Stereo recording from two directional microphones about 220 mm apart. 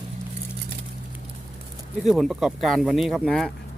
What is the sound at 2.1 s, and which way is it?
Speech, centre (ahead or behind).